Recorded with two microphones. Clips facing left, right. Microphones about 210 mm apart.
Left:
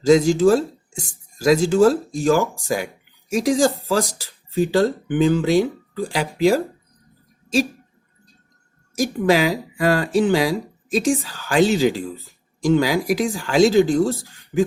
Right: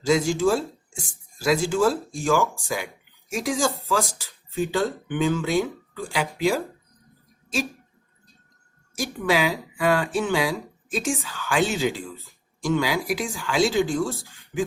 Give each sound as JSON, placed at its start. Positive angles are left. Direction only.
{"t": 0.0, "sound": "speech", "side_deg": 40}
{"t": 9.0, "sound": "speech", "side_deg": 40}